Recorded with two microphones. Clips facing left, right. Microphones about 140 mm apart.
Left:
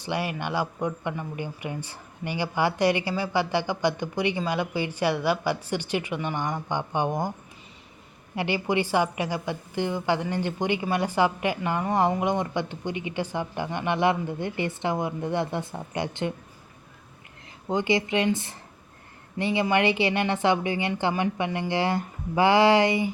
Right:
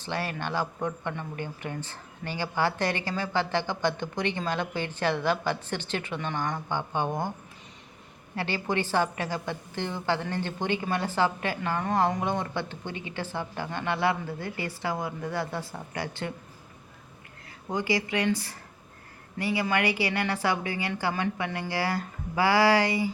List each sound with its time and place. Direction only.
0.0 s a woman's voice: 15° left (ahead or behind)
8.4 s a woman's voice: 15° left (ahead or behind)
17.7 s speech: 20° left (ahead or behind)